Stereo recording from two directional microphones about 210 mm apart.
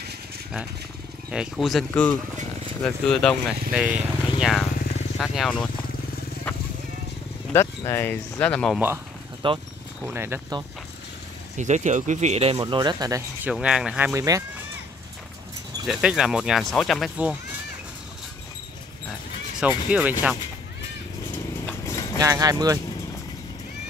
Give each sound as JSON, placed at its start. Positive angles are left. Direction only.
{"t": 1.3, "sound": "speech", "side_deg": 0}
{"t": 7.5, "sound": "speech", "side_deg": 10}
{"t": 9.4, "sound": "speech", "side_deg": -25}
{"t": 10.0, "sound": "speech", "side_deg": -10}
{"t": 11.5, "sound": "speech", "side_deg": -35}
{"t": 15.9, "sound": "speech", "side_deg": -5}
{"t": 19.9, "sound": "speech", "side_deg": -10}
{"t": 21.6, "sound": "horse", "side_deg": 15}
{"t": 22.1, "sound": "speech", "side_deg": -15}